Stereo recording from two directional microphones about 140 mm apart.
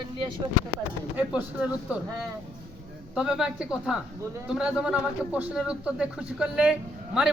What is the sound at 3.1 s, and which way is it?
A man's voice, 5° right (ahead or behind).